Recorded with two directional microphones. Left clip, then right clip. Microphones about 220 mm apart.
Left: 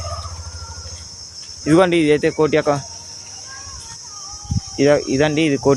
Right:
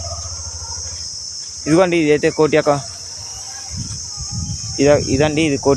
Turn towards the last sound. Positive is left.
turn(degrees=0)  # may be behind; listen again after turning